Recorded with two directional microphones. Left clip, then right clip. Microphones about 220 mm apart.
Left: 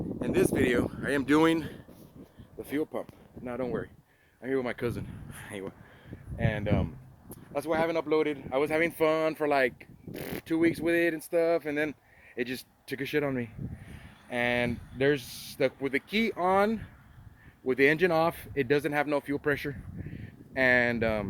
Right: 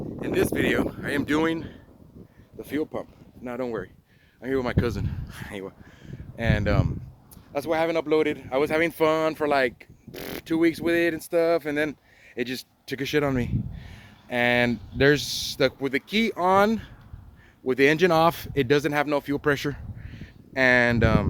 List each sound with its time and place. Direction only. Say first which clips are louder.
0.2 s speech: right 2 dB; centre (ahead or behind)
1.0 s speech: right 1 dB; 35° left (ahead or behind)
1.4 s speech: left 1 dB; 50° left (ahead or behind)
2.6 s speech: right 3 dB; centre (ahead or behind)
6.3 s speech: right 5 dB; 15° right (ahead or behind)